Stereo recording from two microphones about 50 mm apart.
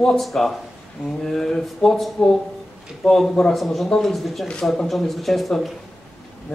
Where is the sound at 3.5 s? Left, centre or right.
Centre.